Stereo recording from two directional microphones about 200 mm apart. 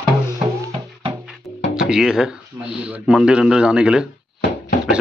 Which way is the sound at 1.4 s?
15° left (ahead or behind).